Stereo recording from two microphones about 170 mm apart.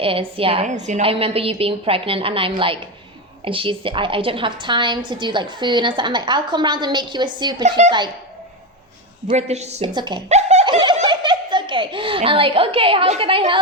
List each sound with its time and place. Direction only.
0.0 s a woman's voice: 30° right (ahead or behind)
7.8 s speech: 40° right (ahead or behind)
9.3 s a woman's voice: 40° right (ahead or behind)
9.8 s a woman's voice: 25° right (ahead or behind)
10.2 s laughter: 40° right (ahead or behind)
10.7 s laughter: 30° right (ahead or behind)
11.1 s a child's voice: 25° right (ahead or behind)